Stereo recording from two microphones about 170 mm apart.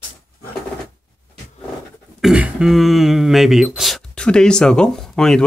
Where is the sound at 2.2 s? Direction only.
5° right (ahead or behind).